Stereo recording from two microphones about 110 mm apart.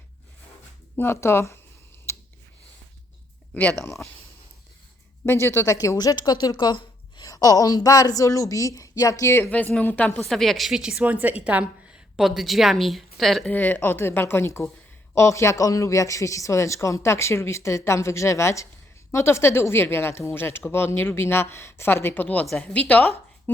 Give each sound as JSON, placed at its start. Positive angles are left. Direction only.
{"t": 0.9, "sound": "a woman's voice", "side_deg": 20}
{"t": 3.5, "sound": "a woman's voice", "side_deg": 10}
{"t": 5.2, "sound": "speech", "side_deg": 20}
{"t": 9.5, "sound": "a woman's voice", "side_deg": 15}
{"t": 10.2, "sound": "a woman's voice", "side_deg": 0}
{"t": 12.1, "sound": "a woman's voice", "side_deg": 0}
{"t": 13.5, "sound": "a woman's voice", "side_deg": 15}